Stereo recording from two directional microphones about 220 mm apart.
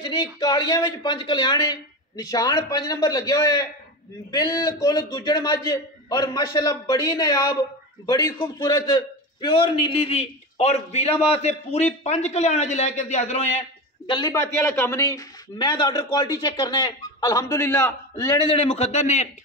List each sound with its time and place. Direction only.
0.0 s a man's voice: 20° left (ahead or behind)